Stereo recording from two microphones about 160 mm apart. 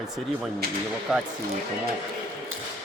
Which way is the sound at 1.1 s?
5° right (ahead or behind).